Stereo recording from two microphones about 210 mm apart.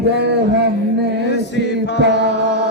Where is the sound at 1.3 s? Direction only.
55° left (ahead or behind).